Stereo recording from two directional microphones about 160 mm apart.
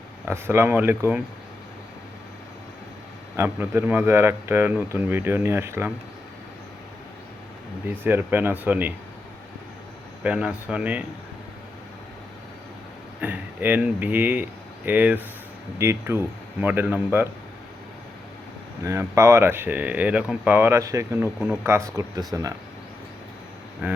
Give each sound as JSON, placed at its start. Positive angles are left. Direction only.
{"t": 0.3, "sound": "speech", "side_deg": -15}
{"t": 3.3, "sound": "speech", "side_deg": -15}
{"t": 7.9, "sound": "speech", "side_deg": -10}
{"t": 10.2, "sound": "speech", "side_deg": -5}
{"t": 13.2, "sound": "speech", "side_deg": -10}
{"t": 18.8, "sound": "speech", "side_deg": -20}